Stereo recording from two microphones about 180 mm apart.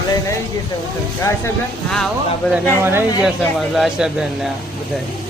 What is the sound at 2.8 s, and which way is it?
Speech, 15° right (ahead or behind).